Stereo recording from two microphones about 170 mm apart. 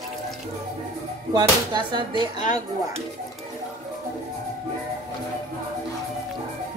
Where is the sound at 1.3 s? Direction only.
30° right (ahead or behind).